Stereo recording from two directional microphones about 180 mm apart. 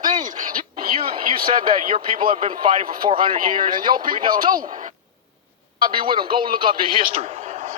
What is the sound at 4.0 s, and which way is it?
Speech, 50° right (ahead or behind).